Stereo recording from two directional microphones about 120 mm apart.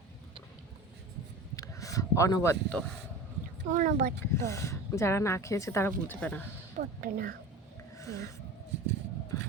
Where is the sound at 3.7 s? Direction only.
90° right.